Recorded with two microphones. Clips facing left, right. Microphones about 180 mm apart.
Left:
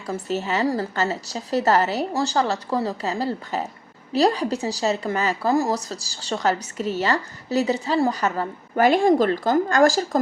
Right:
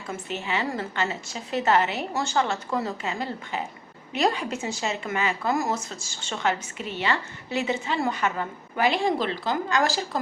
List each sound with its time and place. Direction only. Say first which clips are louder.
0.1 s speech: left 5 dB; 40° left (ahead or behind)